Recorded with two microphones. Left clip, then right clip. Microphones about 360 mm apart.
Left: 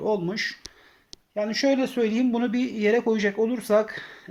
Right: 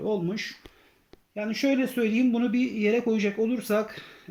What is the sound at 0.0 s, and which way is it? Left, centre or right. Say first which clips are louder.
Speech: left 4 dB; left.